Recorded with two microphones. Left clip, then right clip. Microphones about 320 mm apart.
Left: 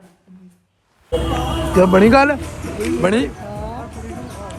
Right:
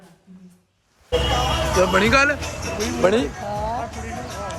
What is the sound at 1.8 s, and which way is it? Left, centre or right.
Speech, centre.